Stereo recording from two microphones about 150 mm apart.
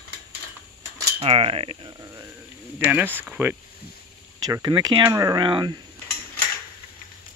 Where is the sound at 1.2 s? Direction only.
40° right (ahead or behind).